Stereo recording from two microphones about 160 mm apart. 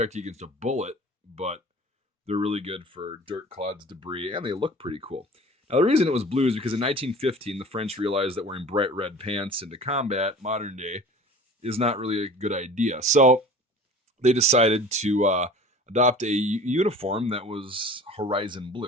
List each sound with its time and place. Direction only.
0.0 s speech: 45° right (ahead or behind)